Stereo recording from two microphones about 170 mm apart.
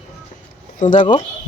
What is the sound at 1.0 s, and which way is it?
Speech, 30° left (ahead or behind).